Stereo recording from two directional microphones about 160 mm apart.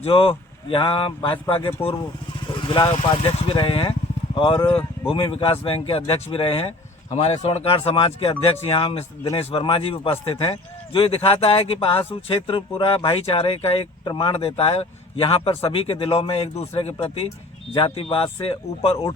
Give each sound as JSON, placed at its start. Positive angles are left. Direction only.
{"t": 0.0, "sound": "a man's voice", "side_deg": 35}
{"t": 2.5, "sound": "vehicle", "side_deg": 30}
{"t": 3.2, "sound": "a man's voice", "side_deg": 30}